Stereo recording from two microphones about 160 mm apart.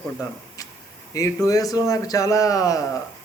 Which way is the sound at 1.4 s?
20° left (ahead or behind).